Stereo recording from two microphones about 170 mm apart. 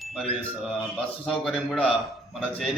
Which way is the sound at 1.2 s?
5° left (ahead or behind).